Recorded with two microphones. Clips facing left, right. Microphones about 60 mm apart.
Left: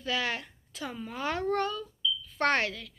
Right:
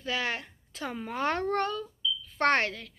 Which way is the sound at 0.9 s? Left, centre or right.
Right.